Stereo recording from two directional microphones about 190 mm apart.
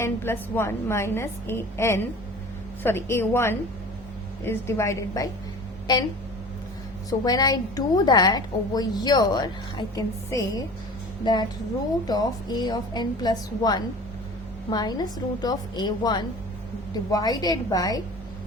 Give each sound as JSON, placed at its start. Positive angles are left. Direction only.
{"t": 0.0, "sound": "a woman's voice", "side_deg": 10}
{"t": 7.1, "sound": "a woman's voice", "side_deg": 20}
{"t": 12.0, "sound": "a woman's voice", "side_deg": 20}